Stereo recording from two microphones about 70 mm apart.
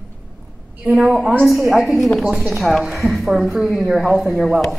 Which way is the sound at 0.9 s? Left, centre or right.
Centre.